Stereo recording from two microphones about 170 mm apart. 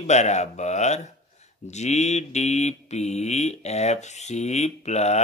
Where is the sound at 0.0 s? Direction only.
40° left (ahead or behind).